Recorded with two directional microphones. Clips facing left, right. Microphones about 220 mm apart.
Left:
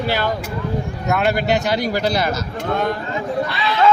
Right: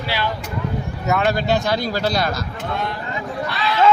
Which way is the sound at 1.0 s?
Centre (ahead or behind).